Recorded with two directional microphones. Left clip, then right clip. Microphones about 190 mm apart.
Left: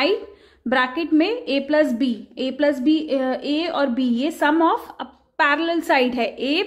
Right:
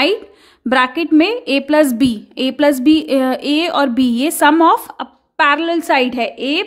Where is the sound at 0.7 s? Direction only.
30° right (ahead or behind).